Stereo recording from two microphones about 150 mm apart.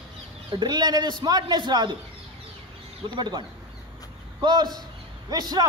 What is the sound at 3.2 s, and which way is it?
A man's voice, 30° right (ahead or behind).